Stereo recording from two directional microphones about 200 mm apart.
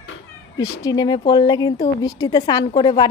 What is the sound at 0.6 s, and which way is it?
Speech, 20° left (ahead or behind).